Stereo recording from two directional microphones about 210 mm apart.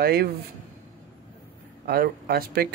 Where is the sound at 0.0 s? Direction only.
50° right (ahead or behind).